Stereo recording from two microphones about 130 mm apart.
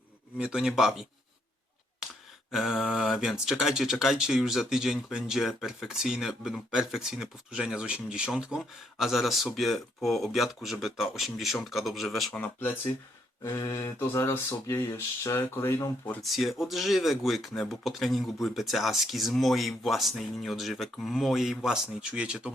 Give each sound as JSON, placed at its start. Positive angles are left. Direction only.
{"t": 0.3, "sound": "speech", "side_deg": -5}
{"t": 2.5, "sound": "speech", "side_deg": 0}
{"t": 12.4, "sound": "speech", "side_deg": 15}
{"t": 13.4, "sound": "speech", "side_deg": 25}
{"t": 16.2, "sound": "speech", "side_deg": 0}